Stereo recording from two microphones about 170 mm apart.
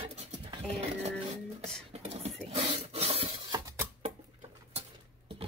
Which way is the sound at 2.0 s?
40° right (ahead or behind).